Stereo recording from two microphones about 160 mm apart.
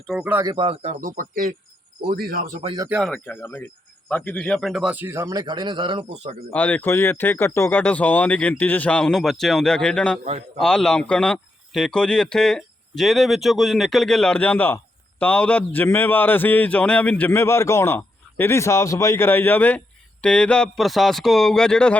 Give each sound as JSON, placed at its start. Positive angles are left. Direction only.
{"t": 0.1, "sound": "speech", "side_deg": -5}
{"t": 0.3, "sound": "speech", "side_deg": -25}
{"t": 2.0, "sound": "speech", "side_deg": -75}
{"t": 2.7, "sound": "speech", "side_deg": -20}
{"t": 3.2, "sound": "a man's voice", "side_deg": 15}
{"t": 6.5, "sound": "a man's voice", "side_deg": 10}